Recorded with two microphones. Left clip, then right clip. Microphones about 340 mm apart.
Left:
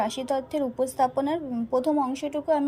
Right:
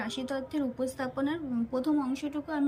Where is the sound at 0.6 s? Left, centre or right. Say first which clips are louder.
Left 9 dB; left.